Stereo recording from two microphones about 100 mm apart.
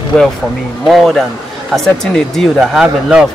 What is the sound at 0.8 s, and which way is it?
Speech, centre (ahead or behind).